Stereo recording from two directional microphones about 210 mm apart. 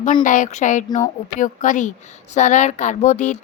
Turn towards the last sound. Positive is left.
turn(degrees=35)  # may be behind; listen again after turning